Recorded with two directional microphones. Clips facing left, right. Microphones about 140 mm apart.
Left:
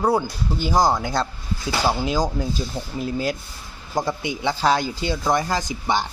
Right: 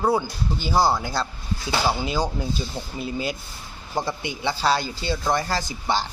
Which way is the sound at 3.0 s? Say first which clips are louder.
Left 3 dB; 10° right (ahead or behind).